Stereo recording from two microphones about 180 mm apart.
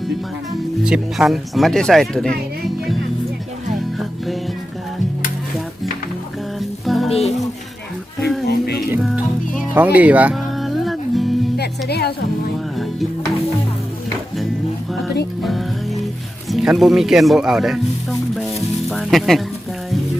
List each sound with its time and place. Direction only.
0.9 s speech: 5° right (ahead or behind)
6.6 s music: centre (ahead or behind)
7.1 s music: 35° left (ahead or behind)
8.4 s music: 65° left (ahead or behind)
9.0 s music: centre (ahead or behind)
11.5 s music: 65° left (ahead or behind)
12.7 s music: centre (ahead or behind)
15.4 s music: centre (ahead or behind)